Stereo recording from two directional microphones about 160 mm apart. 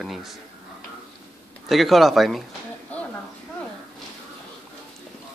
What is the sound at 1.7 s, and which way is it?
Speech, centre (ahead or behind).